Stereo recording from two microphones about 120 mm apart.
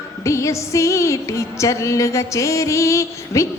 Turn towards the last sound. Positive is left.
turn(degrees=25)  # may be behind; listen again after turning